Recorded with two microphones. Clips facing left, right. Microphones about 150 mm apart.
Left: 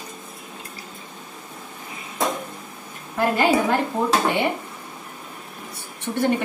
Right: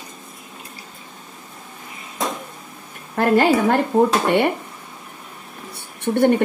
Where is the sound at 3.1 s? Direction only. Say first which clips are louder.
Right 3 dB; 60° right (ahead or behind).